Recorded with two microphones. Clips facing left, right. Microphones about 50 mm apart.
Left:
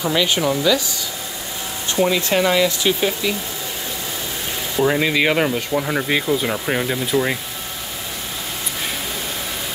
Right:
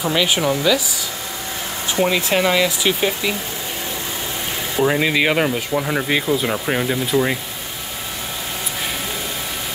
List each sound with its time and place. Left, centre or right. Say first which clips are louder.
0.0 s speech: even; centre
2.0 s speech: even; right
4.7 s speech: even; centre